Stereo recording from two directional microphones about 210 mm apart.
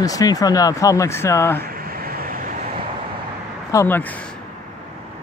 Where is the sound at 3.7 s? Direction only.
10° left (ahead or behind).